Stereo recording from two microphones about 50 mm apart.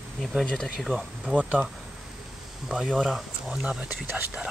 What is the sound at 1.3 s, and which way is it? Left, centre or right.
Speech, right.